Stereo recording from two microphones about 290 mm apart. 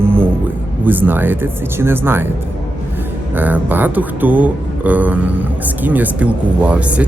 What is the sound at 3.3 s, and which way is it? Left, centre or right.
Speech, centre.